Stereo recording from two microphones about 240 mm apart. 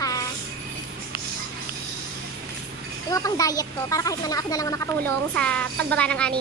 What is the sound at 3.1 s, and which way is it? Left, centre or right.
A child's voice, centre.